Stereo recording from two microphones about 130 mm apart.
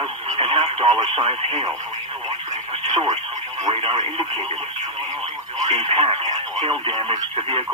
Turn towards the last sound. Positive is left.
turn(degrees=-35)  # may be behind; listen again after turning